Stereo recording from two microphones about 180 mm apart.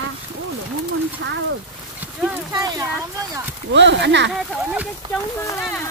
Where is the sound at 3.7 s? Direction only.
80° right.